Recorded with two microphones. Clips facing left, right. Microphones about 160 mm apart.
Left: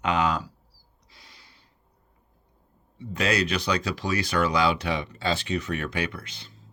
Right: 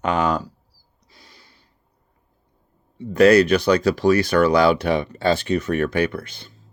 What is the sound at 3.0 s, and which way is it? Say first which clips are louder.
Speech: right 13 dB; 60° right (ahead or behind).